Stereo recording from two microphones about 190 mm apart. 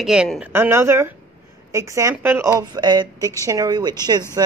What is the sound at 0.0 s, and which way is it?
Speech, 5° right (ahead or behind).